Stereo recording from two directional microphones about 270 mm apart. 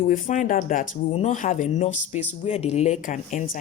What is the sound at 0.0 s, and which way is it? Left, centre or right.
Speech, left.